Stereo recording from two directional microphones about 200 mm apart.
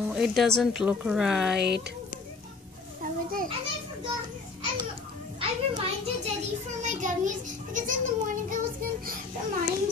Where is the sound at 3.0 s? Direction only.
45° right (ahead or behind).